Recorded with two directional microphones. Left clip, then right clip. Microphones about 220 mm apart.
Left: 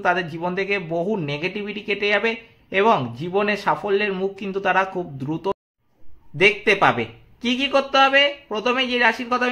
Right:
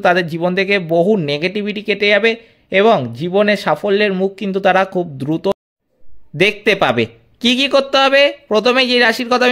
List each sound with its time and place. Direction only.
0.0 s a man's voice: 40° right (ahead or behind)